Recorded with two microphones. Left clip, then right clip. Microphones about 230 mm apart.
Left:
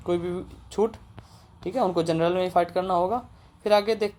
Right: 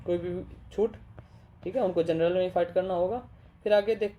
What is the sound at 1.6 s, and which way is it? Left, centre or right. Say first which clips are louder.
Speech: left 2 dB; centre.